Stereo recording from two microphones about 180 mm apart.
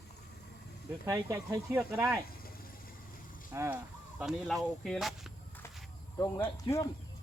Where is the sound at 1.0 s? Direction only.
15° right (ahead or behind).